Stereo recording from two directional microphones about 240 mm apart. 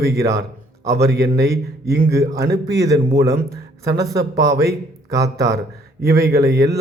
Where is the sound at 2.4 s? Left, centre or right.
Right.